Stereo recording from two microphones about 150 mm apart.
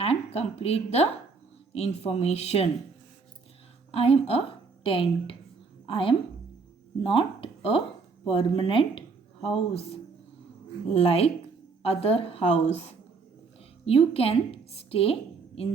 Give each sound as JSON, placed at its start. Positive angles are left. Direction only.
{"t": 0.0, "sound": "speech", "side_deg": 45}
{"t": 3.9, "sound": "a woman's voice", "side_deg": 40}